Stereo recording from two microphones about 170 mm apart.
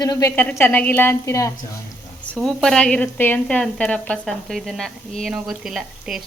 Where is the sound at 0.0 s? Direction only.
20° left (ahead or behind).